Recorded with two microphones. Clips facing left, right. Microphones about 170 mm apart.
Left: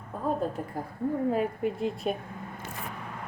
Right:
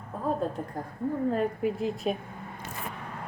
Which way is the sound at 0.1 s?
Centre (ahead or behind).